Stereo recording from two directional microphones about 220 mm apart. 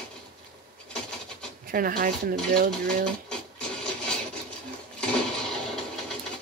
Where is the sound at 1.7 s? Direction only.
40° right (ahead or behind).